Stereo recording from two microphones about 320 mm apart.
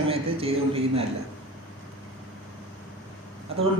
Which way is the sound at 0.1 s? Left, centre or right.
Centre.